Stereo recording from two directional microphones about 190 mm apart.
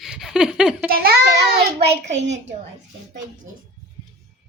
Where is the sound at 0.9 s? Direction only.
50° right (ahead or behind).